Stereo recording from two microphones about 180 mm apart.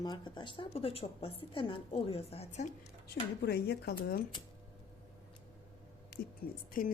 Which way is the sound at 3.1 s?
65° left (ahead or behind).